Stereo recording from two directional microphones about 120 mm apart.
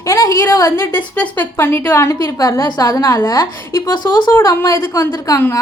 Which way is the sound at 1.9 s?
25° left (ahead or behind).